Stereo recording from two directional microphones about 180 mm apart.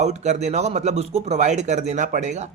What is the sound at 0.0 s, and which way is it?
Speech, 40° right (ahead or behind).